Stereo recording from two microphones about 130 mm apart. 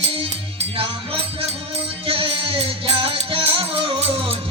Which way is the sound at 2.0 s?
45° right (ahead or behind).